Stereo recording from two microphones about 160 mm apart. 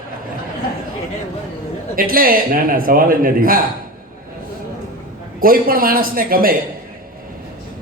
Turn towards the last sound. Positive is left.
turn(degrees=-65)  # may be behind; listen again after turning